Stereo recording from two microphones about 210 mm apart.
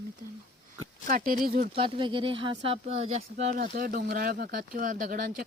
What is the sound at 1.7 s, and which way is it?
Speech, 25° right (ahead or behind).